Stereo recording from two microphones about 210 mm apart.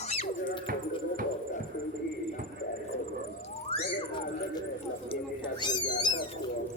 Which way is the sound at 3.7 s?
20° left (ahead or behind).